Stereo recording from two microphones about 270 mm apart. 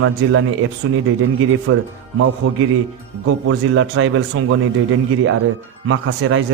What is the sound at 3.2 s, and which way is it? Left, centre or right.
Speech, right.